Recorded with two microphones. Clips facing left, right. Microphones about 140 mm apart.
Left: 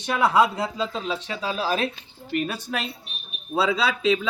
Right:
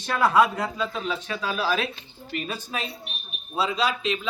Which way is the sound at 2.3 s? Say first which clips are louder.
Left 4 dB; 60° left (ahead or behind).